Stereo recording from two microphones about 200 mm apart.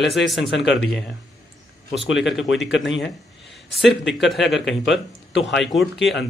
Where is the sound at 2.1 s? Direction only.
Centre (ahead or behind).